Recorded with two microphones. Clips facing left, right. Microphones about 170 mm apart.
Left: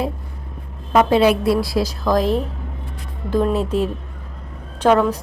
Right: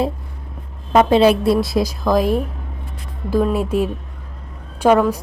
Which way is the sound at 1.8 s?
10° right (ahead or behind).